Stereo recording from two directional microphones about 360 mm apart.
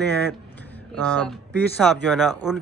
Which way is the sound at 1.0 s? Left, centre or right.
Centre.